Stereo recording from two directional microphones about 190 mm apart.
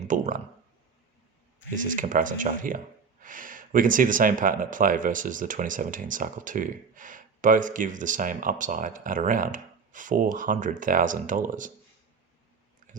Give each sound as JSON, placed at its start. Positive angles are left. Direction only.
{"t": 0.1, "sound": "speech", "side_deg": -45}
{"t": 1.7, "sound": "speech", "side_deg": -45}
{"t": 12.9, "sound": "a sound", "side_deg": -45}